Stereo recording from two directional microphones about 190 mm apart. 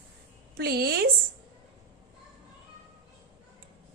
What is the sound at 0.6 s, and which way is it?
Speech, 55° right (ahead or behind).